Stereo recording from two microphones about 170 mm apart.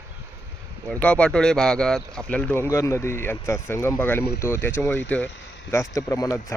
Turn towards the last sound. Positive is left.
turn(degrees=20)  # may be behind; listen again after turning